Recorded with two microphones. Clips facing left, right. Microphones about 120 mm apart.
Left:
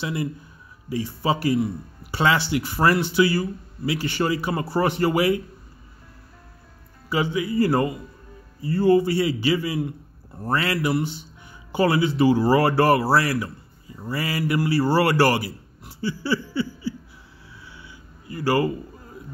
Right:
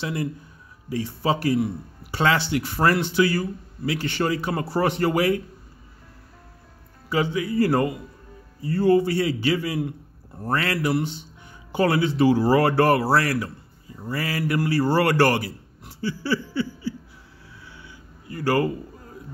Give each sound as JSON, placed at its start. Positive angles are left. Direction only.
{"t": 0.0, "sound": "a man's voice", "side_deg": 5}
{"t": 7.1, "sound": "speech", "side_deg": 5}
{"t": 18.3, "sound": "speech", "side_deg": 5}